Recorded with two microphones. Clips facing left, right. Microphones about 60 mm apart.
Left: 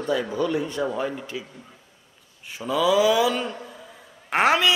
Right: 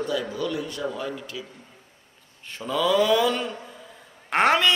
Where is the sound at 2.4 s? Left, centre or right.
Centre.